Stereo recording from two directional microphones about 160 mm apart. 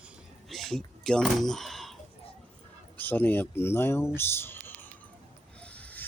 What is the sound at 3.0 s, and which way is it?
Speech, 10° left (ahead or behind).